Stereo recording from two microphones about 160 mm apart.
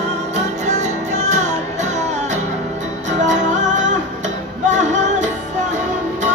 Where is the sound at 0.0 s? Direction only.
45° right (ahead or behind).